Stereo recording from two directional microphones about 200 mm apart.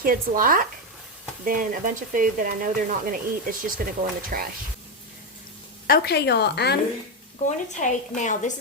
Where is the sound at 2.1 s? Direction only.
45° right (ahead or behind).